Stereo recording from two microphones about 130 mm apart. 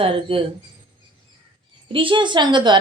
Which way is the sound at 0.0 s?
45° right (ahead or behind).